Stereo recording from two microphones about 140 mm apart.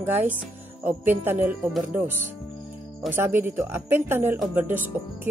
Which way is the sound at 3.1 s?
15° right (ahead or behind).